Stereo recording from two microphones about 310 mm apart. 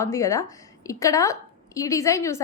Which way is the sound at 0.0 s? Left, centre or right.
Centre.